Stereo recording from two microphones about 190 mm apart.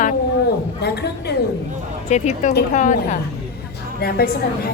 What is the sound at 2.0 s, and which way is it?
Speech, 35° left (ahead or behind).